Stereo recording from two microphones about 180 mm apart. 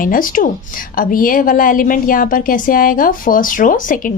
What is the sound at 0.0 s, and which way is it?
A woman's voice, 50° left (ahead or behind).